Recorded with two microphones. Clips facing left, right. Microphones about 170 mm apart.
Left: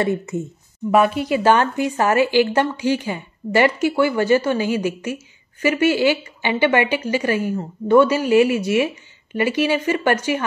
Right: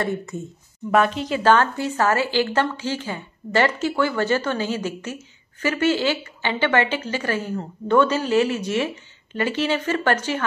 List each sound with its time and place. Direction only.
0.0 s speech: 20° left (ahead or behind)
0.9 s a woman's voice: 10° left (ahead or behind)